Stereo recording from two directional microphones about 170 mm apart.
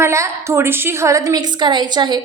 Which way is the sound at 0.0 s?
15° right (ahead or behind).